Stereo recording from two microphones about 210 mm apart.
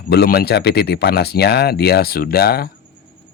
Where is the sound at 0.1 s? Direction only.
50° left (ahead or behind).